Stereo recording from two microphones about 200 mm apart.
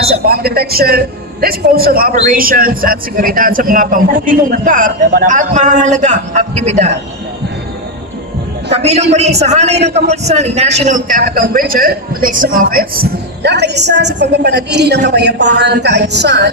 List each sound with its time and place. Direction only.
0.3 s a man's voice: 50° right (ahead or behind); by 6.9 s 35° right (ahead or behind)
8.7 s a man's voice: 30° right (ahead or behind); by 16.5 s 60° right (ahead or behind)